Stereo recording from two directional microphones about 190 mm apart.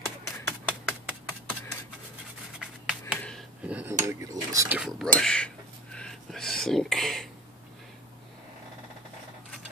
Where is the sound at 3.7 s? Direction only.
10° right (ahead or behind).